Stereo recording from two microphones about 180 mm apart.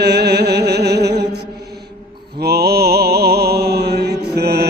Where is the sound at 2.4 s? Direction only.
60° right (ahead or behind).